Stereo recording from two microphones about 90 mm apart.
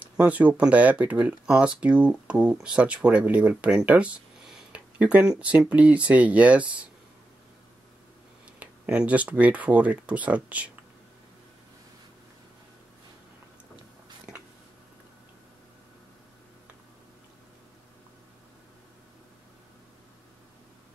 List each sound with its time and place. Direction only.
0.0 s speech: 15° right (ahead or behind)
4.7 s a sound: 15° right (ahead or behind)
5.4 s speech: 15° right (ahead or behind)
8.5 s speech: 15° right (ahead or behind)